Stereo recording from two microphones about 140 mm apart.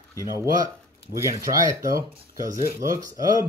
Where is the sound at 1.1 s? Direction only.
20° right (ahead or behind).